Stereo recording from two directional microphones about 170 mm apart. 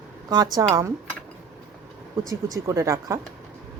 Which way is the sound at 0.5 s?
20° right (ahead or behind).